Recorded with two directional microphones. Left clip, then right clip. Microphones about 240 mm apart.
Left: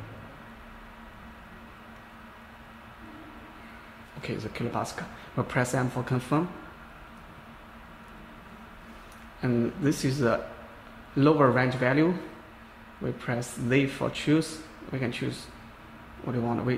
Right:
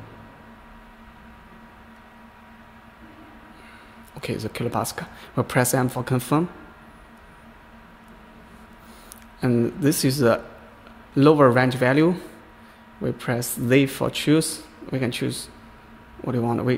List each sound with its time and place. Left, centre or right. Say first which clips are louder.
4.2 s speech: right 6 dB; right
9.4 s speech: right 6 dB; right